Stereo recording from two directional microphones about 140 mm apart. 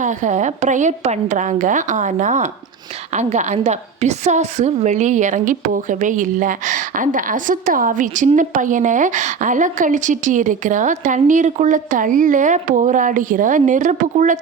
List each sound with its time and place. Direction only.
0.0 s a woman's voice: 60° right (ahead or behind)